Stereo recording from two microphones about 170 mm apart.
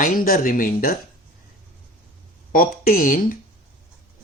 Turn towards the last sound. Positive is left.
turn(degrees=55)  # may be behind; listen again after turning